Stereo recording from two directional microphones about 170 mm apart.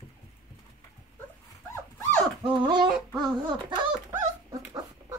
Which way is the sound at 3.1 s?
25° right (ahead or behind).